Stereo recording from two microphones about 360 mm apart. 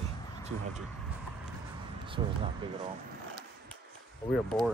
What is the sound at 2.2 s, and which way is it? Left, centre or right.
Speech, centre.